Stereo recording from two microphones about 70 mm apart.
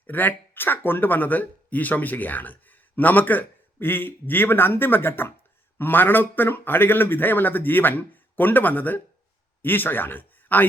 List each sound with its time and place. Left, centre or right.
0.1 s speech: left